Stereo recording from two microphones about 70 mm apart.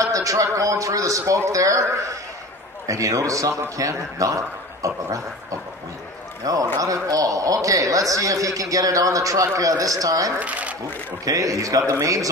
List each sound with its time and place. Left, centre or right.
0.0 s a man's voice: right
10.4 s speech: right
11.2 s a man's voice: right